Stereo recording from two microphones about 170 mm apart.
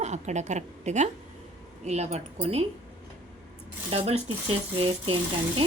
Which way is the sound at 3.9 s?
35° right (ahead or behind).